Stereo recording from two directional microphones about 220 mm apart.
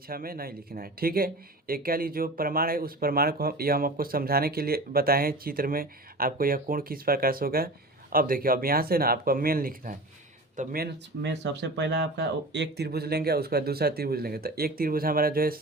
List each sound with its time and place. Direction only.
0.1 s speech: 40° right (ahead or behind)